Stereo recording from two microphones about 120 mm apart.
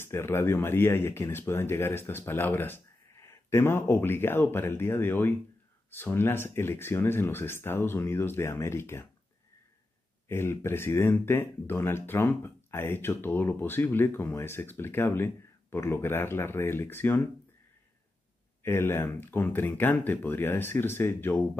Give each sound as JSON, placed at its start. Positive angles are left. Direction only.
{"t": 0.0, "sound": "speech", "side_deg": 20}
{"t": 10.2, "sound": "speech", "side_deg": 20}
{"t": 18.6, "sound": "speech", "side_deg": 20}